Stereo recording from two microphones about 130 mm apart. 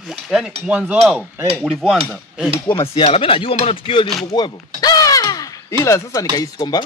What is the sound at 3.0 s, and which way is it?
Speech, 45° left (ahead or behind).